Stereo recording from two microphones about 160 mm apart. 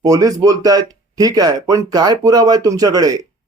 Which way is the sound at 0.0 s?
20° right (ahead or behind).